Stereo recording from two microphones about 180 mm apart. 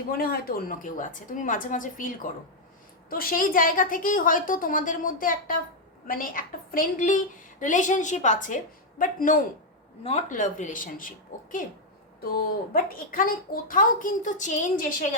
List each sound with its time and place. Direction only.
0.1 s a woman's voice: 55° left (ahead or behind)
12.2 s a woman's voice: 55° left (ahead or behind)